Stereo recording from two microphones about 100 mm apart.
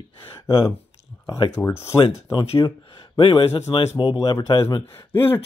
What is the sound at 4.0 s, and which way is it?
Speech, 45° left (ahead or behind).